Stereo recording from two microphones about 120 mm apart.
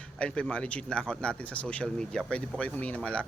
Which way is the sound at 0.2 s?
10° left (ahead or behind).